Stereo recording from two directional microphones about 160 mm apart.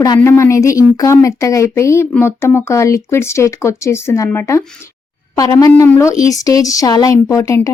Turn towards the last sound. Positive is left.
turn(degrees=20)  # may be behind; listen again after turning